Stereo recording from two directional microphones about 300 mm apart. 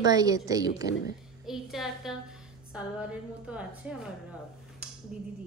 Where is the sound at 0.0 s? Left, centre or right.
Centre.